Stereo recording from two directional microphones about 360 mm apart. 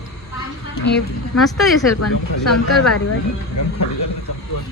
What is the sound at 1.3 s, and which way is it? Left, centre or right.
Speech, centre.